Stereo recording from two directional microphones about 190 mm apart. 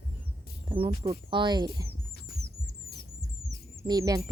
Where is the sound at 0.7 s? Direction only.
25° right (ahead or behind).